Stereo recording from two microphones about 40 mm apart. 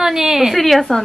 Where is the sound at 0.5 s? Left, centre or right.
Centre.